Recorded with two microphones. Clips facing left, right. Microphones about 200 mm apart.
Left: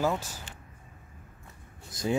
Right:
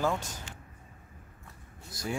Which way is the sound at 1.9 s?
20° left (ahead or behind).